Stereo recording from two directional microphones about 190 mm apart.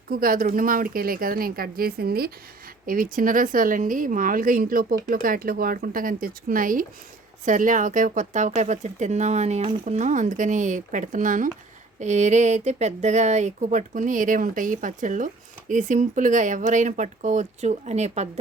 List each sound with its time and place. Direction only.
0.1 s a woman's voice: 50° right (ahead or behind)